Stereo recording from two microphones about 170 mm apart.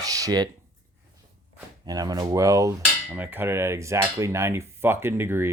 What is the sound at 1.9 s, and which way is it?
Speech, 20° right (ahead or behind).